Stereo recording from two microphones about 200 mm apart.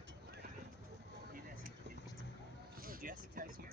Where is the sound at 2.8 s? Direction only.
45° right (ahead or behind).